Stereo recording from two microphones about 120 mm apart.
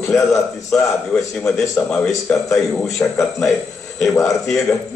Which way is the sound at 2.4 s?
25° left (ahead or behind).